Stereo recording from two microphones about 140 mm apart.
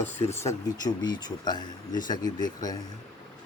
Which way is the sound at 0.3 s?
25° left (ahead or behind).